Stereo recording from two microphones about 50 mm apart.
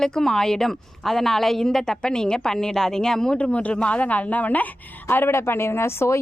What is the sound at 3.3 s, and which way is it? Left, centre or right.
A woman's voice, left.